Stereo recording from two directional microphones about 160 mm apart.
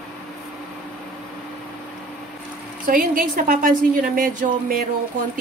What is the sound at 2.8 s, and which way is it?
A woman's voice, 55° right (ahead or behind).